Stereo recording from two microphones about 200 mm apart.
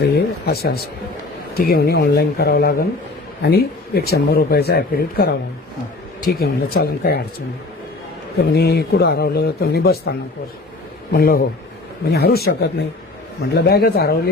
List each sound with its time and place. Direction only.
0.0 s speech: 50° left (ahead or behind)
8.5 s speech: 55° left (ahead or behind)
13.5 s speech: 50° left (ahead or behind)